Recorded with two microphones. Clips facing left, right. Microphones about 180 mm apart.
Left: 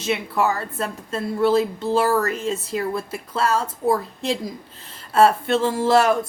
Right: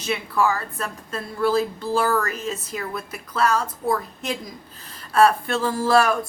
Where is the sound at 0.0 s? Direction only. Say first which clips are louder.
Left 1 dB; 25° left (ahead or behind).